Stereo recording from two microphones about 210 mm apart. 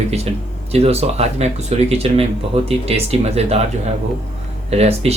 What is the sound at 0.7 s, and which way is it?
Speech, 30° right (ahead or behind).